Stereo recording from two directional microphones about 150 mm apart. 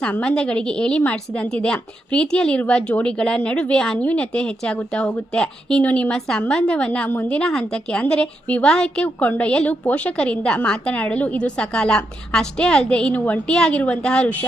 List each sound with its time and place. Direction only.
0.0 s a woman's voice: 5° left (ahead or behind)